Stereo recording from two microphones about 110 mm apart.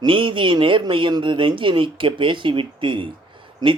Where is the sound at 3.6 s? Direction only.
40° right (ahead or behind).